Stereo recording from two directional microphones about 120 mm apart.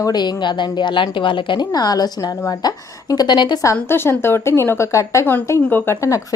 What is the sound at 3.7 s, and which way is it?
A woman's voice, 20° left (ahead or behind).